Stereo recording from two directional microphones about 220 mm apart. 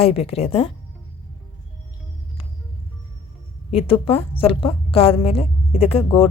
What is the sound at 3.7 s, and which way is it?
A woman's voice, 25° left (ahead or behind).